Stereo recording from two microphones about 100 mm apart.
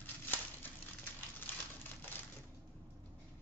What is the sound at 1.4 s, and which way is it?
Crumpling, 20° left (ahead or behind).